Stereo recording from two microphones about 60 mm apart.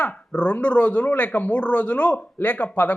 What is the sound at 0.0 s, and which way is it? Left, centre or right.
Speech, left.